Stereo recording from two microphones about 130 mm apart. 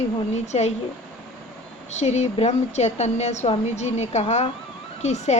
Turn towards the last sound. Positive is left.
turn(degrees=60)  # may be behind; listen again after turning